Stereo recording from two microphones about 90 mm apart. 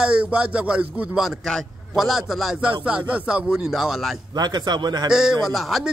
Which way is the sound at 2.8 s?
15° right (ahead or behind).